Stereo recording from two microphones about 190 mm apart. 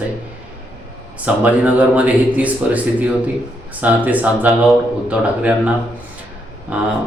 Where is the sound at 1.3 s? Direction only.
5° right (ahead or behind).